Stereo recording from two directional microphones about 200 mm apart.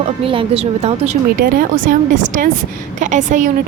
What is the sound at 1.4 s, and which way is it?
A woman's voice, 45° right (ahead or behind).